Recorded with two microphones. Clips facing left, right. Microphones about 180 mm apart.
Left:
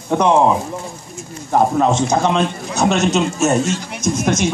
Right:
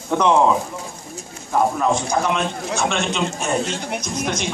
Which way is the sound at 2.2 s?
35° left (ahead or behind).